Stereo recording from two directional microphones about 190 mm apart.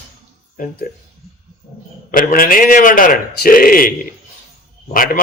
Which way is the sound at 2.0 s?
45° left (ahead or behind).